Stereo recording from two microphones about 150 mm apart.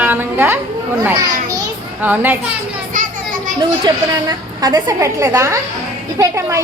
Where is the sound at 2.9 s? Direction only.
60° right (ahead or behind).